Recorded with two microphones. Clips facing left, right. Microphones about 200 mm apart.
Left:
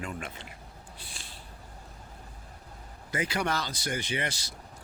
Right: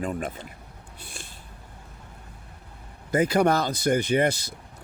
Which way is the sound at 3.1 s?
50° right (ahead or behind).